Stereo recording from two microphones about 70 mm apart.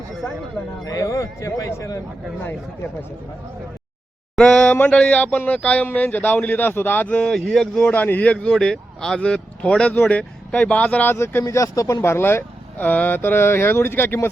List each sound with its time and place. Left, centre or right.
0.9 s speech: left
2.4 s speech: left
4.4 s speech: centre
4.7 s speech: left
7.3 s speech: centre
7.9 s speech: left
11.1 s speech: left
11.4 s speech: left
12.0 s speech: left